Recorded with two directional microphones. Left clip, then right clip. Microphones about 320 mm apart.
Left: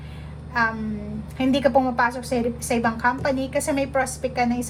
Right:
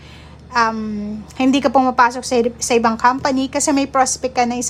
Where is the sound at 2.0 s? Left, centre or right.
Centre.